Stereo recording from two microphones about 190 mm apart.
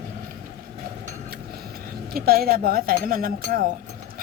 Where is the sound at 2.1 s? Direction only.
50° right (ahead or behind).